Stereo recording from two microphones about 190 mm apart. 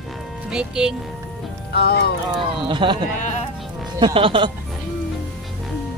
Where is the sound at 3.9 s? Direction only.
25° right (ahead or behind).